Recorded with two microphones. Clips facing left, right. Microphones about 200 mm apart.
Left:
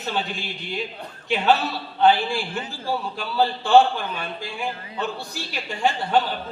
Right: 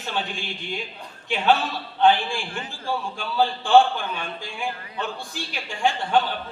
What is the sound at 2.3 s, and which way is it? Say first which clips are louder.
A man's voice: left 3 dB; 40° left (ahead or behind).